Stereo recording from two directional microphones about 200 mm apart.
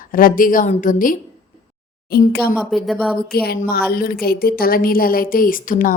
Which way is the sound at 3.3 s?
50° left (ahead or behind).